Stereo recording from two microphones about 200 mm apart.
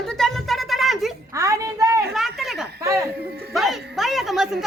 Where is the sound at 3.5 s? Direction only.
Centre (ahead or behind).